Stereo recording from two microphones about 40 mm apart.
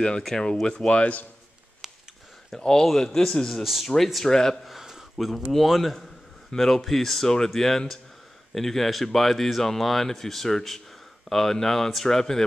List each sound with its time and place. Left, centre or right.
0.2 s speech: centre
2.8 s speech: centre
3.6 s speech: centre
3.9 s speech: centre
4.6 s a sound: centre
5.2 s speech: centre